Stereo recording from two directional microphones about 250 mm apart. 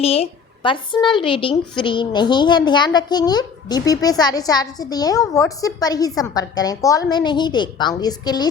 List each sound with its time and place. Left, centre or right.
0.0 s speech: left